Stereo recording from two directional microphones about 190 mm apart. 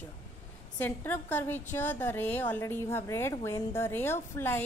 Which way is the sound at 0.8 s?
10° left (ahead or behind).